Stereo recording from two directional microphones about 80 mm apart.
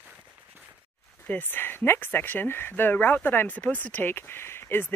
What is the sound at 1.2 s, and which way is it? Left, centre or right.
Speech, left.